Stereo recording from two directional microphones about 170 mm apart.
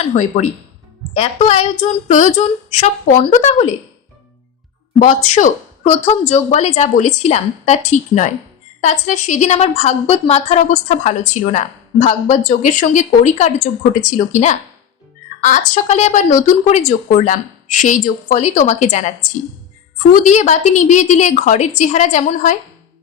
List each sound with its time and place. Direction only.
0.0 s a woman's voice: 45° left (ahead or behind)
4.9 s a woman's voice: 45° left (ahead or behind)
20.2 s a woman's voice: 45° left (ahead or behind)